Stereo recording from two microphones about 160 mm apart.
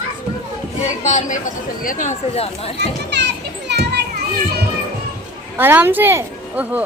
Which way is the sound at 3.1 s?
90° right.